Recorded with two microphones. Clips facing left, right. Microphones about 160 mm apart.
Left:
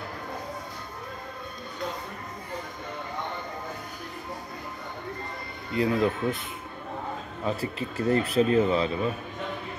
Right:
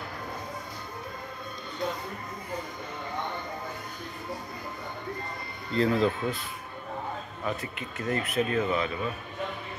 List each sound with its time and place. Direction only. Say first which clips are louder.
5.7 s speech: even; 15° left (ahead or behind)
7.4 s speech: left 4 dB; 30° left (ahead or behind)